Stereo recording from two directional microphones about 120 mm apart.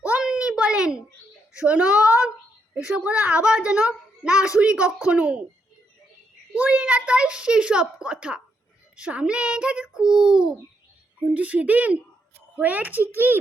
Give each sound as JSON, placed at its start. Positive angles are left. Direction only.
{"t": 0.0, "sound": "a sound", "side_deg": -10}
{"t": 1.5, "sound": "a woman's voice", "side_deg": -10}
{"t": 6.6, "sound": "a woman's voice", "side_deg": -10}